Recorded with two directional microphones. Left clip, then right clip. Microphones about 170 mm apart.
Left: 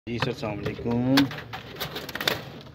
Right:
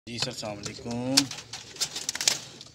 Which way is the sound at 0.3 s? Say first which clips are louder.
Left 4 dB; 45° right (ahead or behind).